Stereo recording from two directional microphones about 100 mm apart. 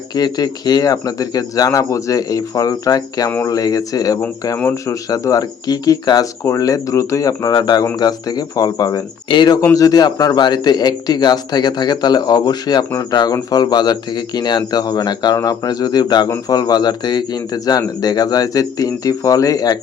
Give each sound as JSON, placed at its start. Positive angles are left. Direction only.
{"t": 0.1, "sound": "speech", "side_deg": 45}
{"t": 4.5, "sound": "speech", "side_deg": 25}
{"t": 9.3, "sound": "a man's voice", "side_deg": 50}
{"t": 9.7, "sound": "a man's voice", "side_deg": 40}